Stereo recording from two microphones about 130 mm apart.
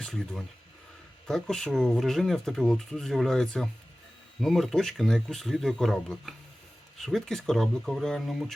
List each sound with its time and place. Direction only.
0.0 s speech: 5° left (ahead or behind)